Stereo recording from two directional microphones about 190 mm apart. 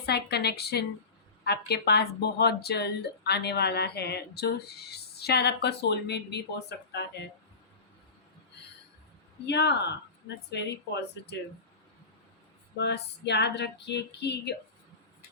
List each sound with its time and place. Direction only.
0.0 s speech: 60° left (ahead or behind)
9.5 s speech: 60° left (ahead or behind)
12.7 s speech: 65° left (ahead or behind)